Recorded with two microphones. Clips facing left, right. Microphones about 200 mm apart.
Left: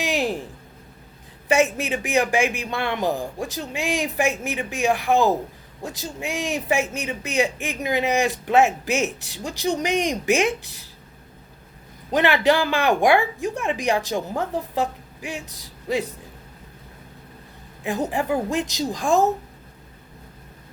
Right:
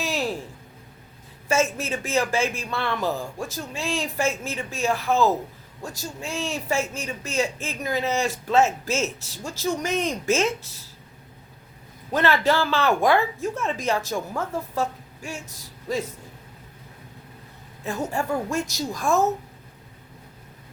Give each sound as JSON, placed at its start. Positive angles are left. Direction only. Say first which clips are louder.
{"t": 0.0, "sound": "a sound", "louder": "left 3 dB", "side_deg": 15}
{"t": 1.5, "sound": "speech", "louder": "left 3 dB", "side_deg": 15}
{"t": 12.1, "sound": "speech", "louder": "left 2 dB", "side_deg": 15}
{"t": 17.8, "sound": "speech", "louder": "left 3 dB", "side_deg": 15}